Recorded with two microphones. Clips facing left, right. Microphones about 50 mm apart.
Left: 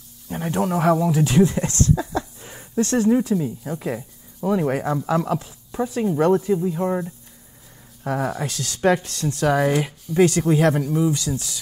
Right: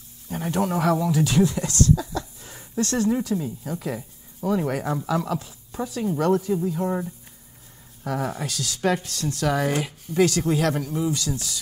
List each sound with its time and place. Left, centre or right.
0.3 s a man's voice: left
8.0 s speech: left